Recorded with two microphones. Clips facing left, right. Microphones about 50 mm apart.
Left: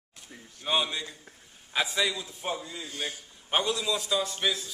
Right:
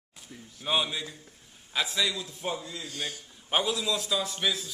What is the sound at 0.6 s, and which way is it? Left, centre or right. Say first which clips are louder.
A man's voice: even; centre.